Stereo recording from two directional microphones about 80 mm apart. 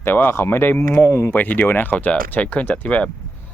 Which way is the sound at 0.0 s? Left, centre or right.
Left.